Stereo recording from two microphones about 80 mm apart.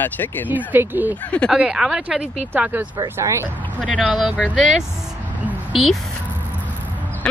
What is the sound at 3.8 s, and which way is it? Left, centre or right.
Speech, centre.